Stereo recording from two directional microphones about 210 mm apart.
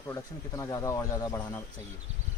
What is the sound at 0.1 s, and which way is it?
Speech, 15° left (ahead or behind).